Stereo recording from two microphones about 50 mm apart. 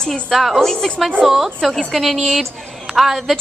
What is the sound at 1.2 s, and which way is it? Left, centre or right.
A woman's voice, centre.